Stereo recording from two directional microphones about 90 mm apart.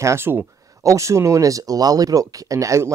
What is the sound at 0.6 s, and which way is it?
Speech, 40° right (ahead or behind).